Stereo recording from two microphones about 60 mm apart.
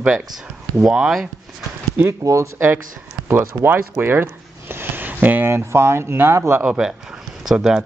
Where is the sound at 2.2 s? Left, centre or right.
Right.